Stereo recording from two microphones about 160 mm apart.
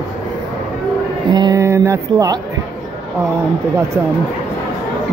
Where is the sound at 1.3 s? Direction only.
25° right (ahead or behind).